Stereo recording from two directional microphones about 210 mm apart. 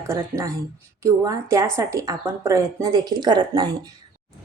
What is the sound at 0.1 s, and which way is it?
A woman's voice, 15° right (ahead or behind).